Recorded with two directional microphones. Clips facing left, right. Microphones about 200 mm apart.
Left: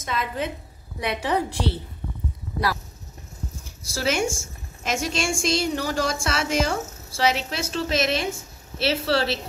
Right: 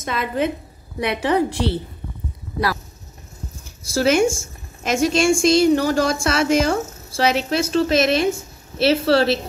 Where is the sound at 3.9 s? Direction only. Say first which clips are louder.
Right 8 dB; 50° right (ahead or behind).